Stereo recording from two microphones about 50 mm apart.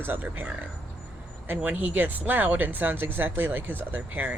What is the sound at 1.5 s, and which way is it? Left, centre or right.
Speech, right.